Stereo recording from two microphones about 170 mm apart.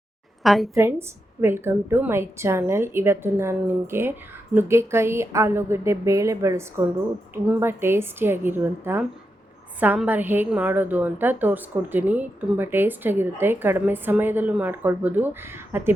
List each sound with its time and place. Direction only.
0.4 s a woman's voice: centre (ahead or behind)
0.7 s a woman's voice: 15° right (ahead or behind)